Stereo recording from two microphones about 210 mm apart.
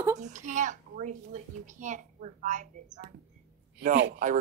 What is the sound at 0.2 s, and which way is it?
A child's voice, 35° right (ahead or behind).